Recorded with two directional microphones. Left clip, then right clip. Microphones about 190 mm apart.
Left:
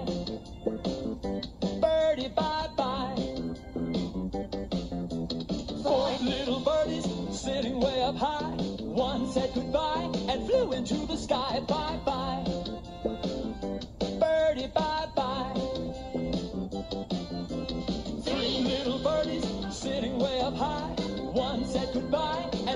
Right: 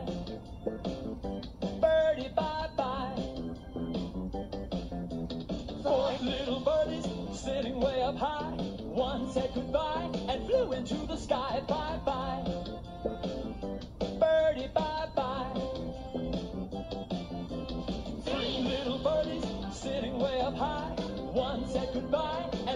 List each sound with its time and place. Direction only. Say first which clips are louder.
1.6 s music: left 1 dB; 25° left (ahead or behind)
5.5 s music: left 2 dB; 25° left (ahead or behind)
14.0 s music: left 1 dB; 20° left (ahead or behind)
17.8 s music: left 3 dB; 20° left (ahead or behind)